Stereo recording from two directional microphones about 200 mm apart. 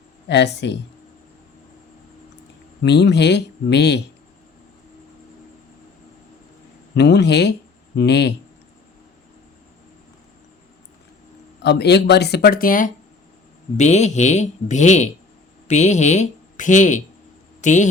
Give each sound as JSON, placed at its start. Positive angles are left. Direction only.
{"t": 0.3, "sound": "speech", "side_deg": 60}
{"t": 2.8, "sound": "speech", "side_deg": 55}
{"t": 6.9, "sound": "speech", "side_deg": 55}
{"t": 11.6, "sound": "a woman's voice", "side_deg": 55}